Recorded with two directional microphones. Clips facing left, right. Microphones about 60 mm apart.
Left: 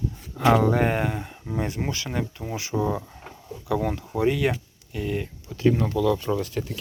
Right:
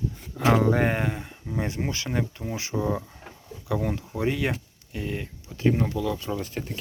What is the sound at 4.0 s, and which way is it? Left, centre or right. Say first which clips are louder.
Speech: left 4 dB; centre.